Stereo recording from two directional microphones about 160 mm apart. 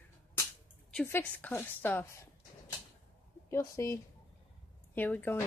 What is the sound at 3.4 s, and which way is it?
Speech, 15° left (ahead or behind).